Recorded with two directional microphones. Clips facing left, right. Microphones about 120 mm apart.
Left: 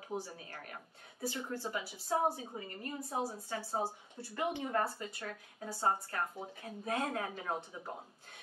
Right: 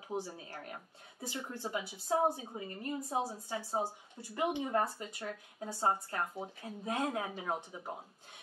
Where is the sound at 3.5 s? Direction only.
20° right (ahead or behind).